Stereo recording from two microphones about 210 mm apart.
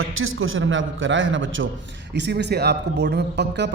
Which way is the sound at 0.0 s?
70° right (ahead or behind).